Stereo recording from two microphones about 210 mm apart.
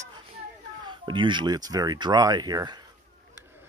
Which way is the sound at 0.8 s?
20° right (ahead or behind).